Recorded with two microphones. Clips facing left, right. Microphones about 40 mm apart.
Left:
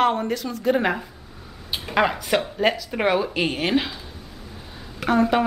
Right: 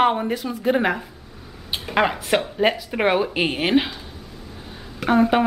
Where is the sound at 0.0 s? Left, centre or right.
Centre.